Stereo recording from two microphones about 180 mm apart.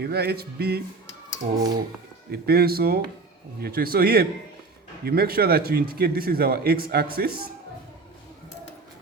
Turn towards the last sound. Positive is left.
turn(degrees=-55)  # may be behind; listen again after turning